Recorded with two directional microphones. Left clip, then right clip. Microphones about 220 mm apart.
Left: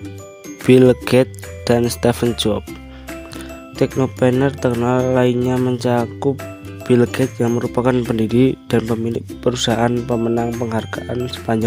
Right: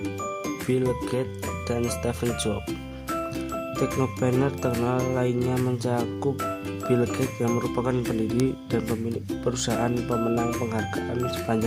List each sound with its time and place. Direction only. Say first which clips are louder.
0.7 s speech: left 15 dB; 40° left (ahead or behind)
3.8 s speech: left 10 dB; 35° left (ahead or behind)